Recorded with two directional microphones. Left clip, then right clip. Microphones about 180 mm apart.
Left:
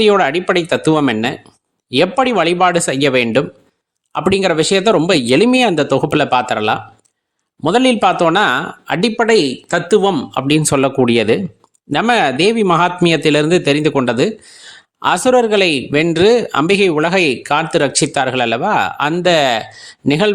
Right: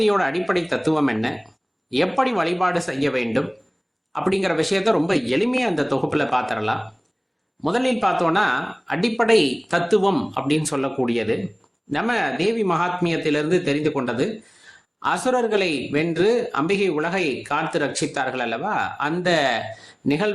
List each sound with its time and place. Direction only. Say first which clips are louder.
0.0 s speech: left 8 dB; 50° left (ahead or behind)
1.9 s a man's voice: left 7 dB; 45° left (ahead or behind)
10.3 s a man's voice: left 9 dB; 55° left (ahead or behind)